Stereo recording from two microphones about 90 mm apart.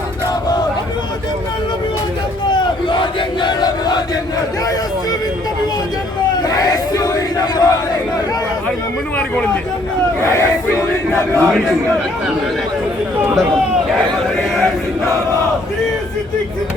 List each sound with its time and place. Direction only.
2.5 s battle cry: 60° left (ahead or behind)
6.6 s battle cry: 45° left (ahead or behind)
9.1 s a man's voice: 10° left (ahead or behind)
10.3 s battle cry: 30° left (ahead or behind)
11.3 s a man's voice: 5° left (ahead or behind)
14.5 s chant: centre (ahead or behind)